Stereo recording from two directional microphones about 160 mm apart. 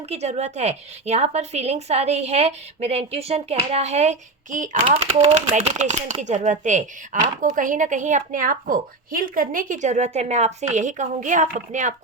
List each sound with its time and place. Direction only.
0.1 s a woman's voice: 45° right (ahead or behind)
4.9 s a woman's voice: 40° right (ahead or behind)